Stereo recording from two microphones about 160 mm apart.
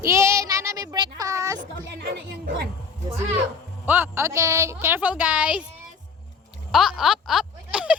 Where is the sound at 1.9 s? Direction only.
85° right.